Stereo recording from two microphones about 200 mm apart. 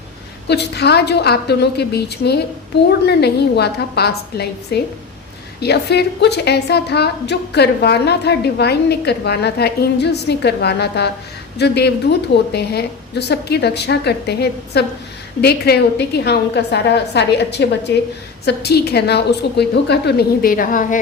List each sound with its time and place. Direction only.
0.4 s a woman's voice: 55° left (ahead or behind)